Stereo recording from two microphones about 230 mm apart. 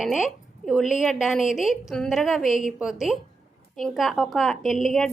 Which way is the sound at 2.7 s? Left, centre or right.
Centre.